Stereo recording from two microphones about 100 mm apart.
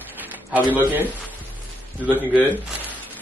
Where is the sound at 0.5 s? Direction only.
15° right (ahead or behind).